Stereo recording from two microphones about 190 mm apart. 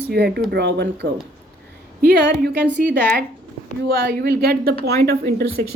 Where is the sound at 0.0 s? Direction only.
60° right (ahead or behind).